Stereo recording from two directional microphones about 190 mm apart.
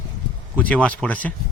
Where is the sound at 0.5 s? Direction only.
5° left (ahead or behind).